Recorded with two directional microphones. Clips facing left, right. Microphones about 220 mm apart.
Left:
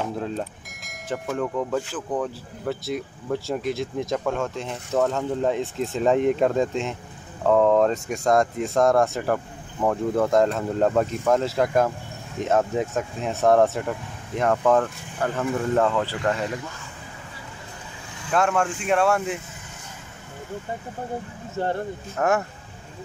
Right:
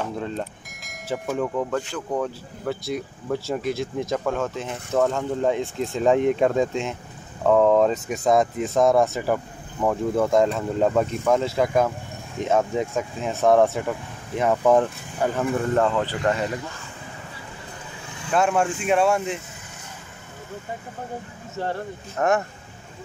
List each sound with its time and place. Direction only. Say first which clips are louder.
0.0 s speech: left 1 dB; centre (ahead or behind); by 15.4 s 15° right (ahead or behind)
15.7 s speech: left 1 dB; centre (ahead or behind)
18.5 s speech: right 1 dB; 5° right (ahead or behind)
22.1 s speech: right 1 dB; 5° left (ahead or behind)